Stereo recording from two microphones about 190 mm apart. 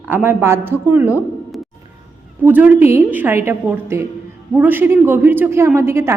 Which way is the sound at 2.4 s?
10° right (ahead or behind).